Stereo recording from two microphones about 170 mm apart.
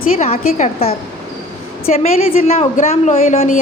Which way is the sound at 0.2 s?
40° left (ahead or behind).